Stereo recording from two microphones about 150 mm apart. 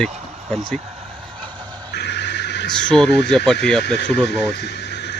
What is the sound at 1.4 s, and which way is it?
Music, 30° right (ahead or behind).